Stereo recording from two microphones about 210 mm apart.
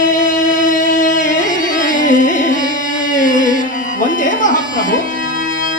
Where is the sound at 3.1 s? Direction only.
40° left (ahead or behind).